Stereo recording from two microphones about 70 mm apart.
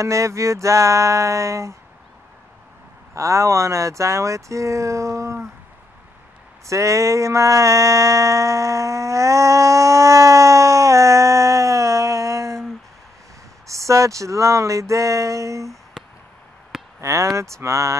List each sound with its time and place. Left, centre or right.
0.0 s speech: right
3.2 s speech: right
6.7 s a sound: right
13.7 s speech: right
17.0 s speech: right